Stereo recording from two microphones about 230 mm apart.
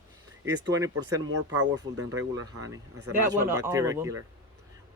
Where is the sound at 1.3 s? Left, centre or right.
Right.